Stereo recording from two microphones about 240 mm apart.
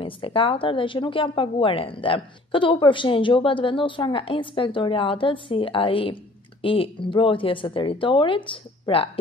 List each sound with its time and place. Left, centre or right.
0.0 s speech: left